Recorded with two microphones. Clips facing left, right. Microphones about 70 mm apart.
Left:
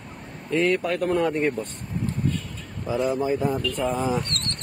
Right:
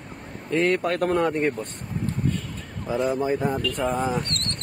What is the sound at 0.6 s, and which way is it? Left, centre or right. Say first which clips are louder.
Speech: right 1 dB; right.